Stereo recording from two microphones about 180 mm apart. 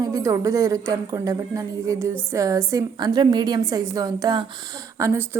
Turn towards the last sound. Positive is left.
turn(degrees=-15)  # may be behind; listen again after turning